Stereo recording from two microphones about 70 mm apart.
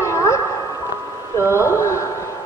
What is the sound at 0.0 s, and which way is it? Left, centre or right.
Music, left.